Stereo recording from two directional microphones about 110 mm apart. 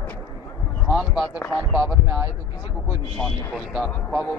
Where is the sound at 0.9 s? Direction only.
5° right (ahead or behind).